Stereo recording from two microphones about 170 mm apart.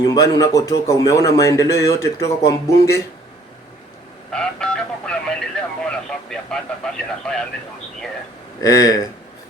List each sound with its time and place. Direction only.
0.0 s a man's voice: 20° left (ahead or behind)
4.3 s vehicle: 5° left (ahead or behind)
8.6 s a man's voice: 20° left (ahead or behind)